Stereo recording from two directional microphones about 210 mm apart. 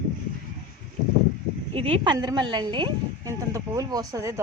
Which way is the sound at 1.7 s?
25° right (ahead or behind).